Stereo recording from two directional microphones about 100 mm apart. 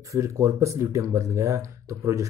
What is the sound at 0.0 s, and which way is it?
Speech, 30° right (ahead or behind).